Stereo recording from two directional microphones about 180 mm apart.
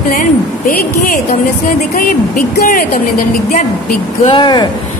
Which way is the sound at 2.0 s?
50° left (ahead or behind).